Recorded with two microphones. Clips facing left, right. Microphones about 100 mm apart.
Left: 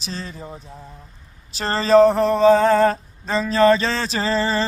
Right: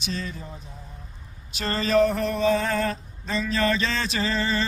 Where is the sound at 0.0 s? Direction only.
35° left (ahead or behind).